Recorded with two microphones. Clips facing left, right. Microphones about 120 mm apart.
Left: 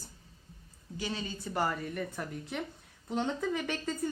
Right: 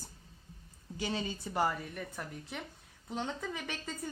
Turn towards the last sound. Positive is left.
turn(degrees=-5)  # may be behind; listen again after turning